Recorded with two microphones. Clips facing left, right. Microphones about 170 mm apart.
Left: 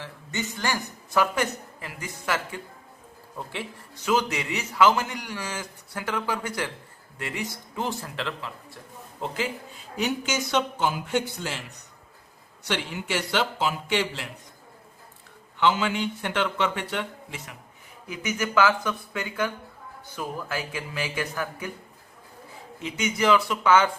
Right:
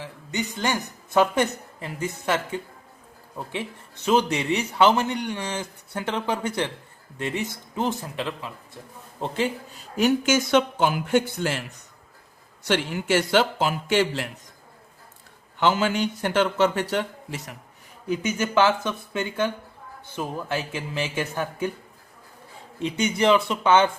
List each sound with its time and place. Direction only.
0.0 s a man's voice: 15° right (ahead or behind)
9.2 s a man's voice: 30° right (ahead or behind)
10.1 s speech: 50° right (ahead or behind)
12.6 s speech: 50° right (ahead or behind)
15.6 s a man's voice: 45° right (ahead or behind)
18.1 s a man's voice: 30° right (ahead or behind)
22.8 s a man's voice: 30° right (ahead or behind)